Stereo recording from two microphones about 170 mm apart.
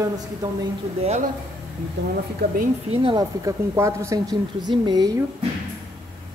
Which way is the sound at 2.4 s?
60° right (ahead or behind).